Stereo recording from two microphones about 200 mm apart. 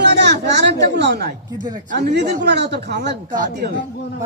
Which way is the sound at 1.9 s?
55° right (ahead or behind).